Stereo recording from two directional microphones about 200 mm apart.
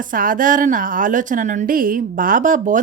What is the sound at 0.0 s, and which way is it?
A woman's voice, 45° right (ahead or behind).